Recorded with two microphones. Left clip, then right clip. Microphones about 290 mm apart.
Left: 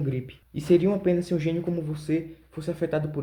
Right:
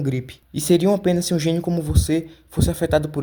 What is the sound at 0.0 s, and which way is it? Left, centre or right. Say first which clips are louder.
Speech: right 5 dB; right.